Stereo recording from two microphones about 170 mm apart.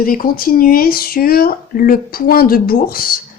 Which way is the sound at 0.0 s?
55° left (ahead or behind).